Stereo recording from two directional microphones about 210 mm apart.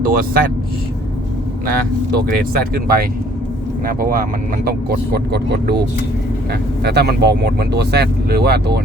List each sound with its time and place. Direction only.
0.0 s speech: 45° right (ahead or behind)
2.1 s speech: 45° right (ahead or behind)